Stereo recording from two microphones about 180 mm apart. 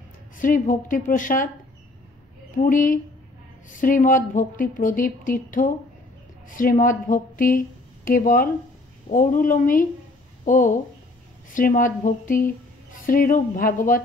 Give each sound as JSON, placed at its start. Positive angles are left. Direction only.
{"t": 0.4, "sound": "speech", "side_deg": 50}
{"t": 2.5, "sound": "speech", "side_deg": 50}